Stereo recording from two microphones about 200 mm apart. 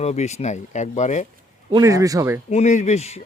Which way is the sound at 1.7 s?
15° right (ahead or behind).